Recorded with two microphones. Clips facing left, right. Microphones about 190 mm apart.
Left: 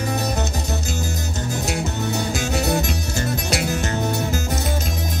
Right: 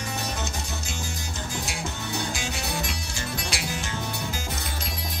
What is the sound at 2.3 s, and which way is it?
Music, 40° left (ahead or behind).